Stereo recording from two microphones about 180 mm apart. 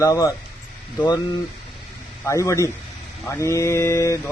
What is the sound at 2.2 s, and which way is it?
A man's voice, 15° left (ahead or behind).